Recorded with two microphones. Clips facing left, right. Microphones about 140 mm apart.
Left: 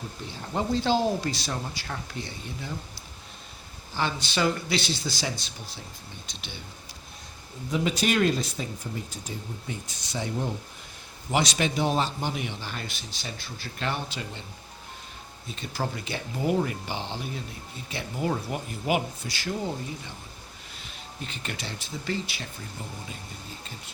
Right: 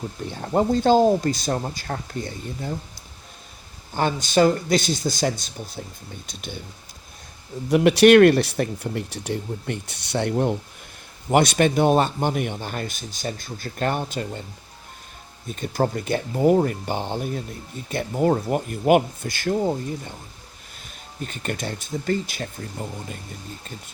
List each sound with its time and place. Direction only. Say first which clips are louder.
0.4 s a man's voice: right 7 dB; 50° right (ahead or behind)
3.9 s a man's voice: right 8 dB; 45° right (ahead or behind)
7.7 s a man's voice: right 13 dB; 70° right (ahead or behind); by 14.4 s 45° right (ahead or behind)
15.4 s a man's voice: right 9 dB; 50° right (ahead or behind)